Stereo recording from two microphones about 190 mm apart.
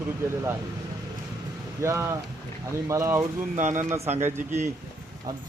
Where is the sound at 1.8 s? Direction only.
15° right (ahead or behind).